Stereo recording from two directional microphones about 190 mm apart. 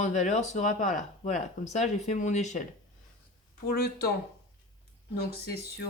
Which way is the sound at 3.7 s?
55° left (ahead or behind).